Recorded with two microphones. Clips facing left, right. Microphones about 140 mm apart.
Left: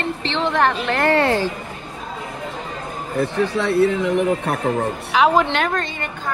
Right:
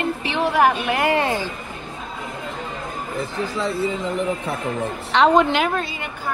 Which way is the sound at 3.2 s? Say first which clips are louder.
Left 6 dB; 65° left (ahead or behind).